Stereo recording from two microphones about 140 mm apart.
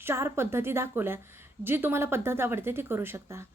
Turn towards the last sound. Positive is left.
turn(degrees=-15)  # may be behind; listen again after turning